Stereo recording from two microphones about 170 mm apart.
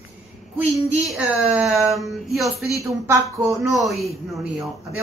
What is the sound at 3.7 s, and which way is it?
Speech, centre (ahead or behind).